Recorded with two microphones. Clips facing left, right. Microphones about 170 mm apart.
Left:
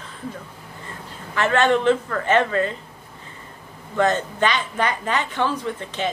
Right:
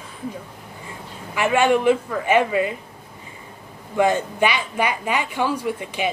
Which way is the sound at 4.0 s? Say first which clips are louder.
Right 1 dB; 10° right (ahead or behind).